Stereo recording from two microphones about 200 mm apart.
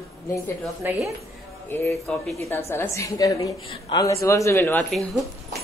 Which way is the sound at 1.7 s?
10° left (ahead or behind).